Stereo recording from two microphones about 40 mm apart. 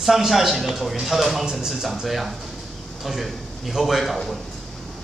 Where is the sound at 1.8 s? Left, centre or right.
Centre.